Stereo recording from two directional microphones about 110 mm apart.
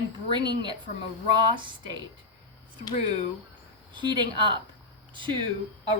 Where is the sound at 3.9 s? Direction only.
45° right (ahead or behind).